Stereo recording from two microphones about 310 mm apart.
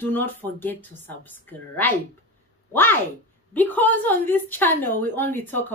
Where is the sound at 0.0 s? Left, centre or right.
Centre.